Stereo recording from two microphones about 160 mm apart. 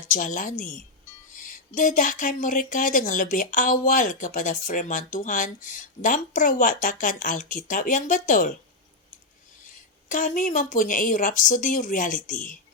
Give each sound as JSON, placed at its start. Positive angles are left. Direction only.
{"t": 0.1, "sound": "a woman's voice", "side_deg": 55}
{"t": 9.7, "sound": "speech", "side_deg": 55}